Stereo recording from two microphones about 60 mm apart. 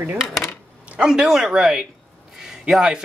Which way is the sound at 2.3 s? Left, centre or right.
Centre.